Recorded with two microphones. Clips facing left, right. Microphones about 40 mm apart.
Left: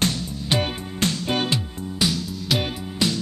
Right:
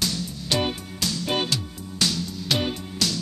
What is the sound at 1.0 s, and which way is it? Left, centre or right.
Music, left.